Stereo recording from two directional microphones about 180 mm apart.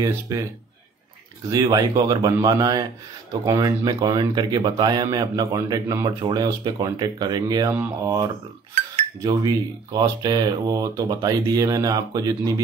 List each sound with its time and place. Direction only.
0.0 s speech: 20° right (ahead or behind)
1.5 s speech: 20° right (ahead or behind)
9.9 s speech: 20° right (ahead or behind)